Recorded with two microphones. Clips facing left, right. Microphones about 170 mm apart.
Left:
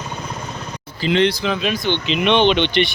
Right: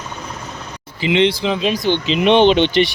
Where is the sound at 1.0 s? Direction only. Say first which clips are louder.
Right 2 dB; 20° right (ahead or behind).